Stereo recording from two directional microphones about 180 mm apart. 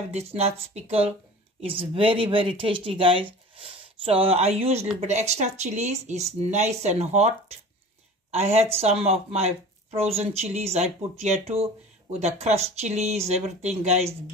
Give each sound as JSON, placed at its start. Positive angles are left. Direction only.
{"t": 0.1, "sound": "speech", "side_deg": -35}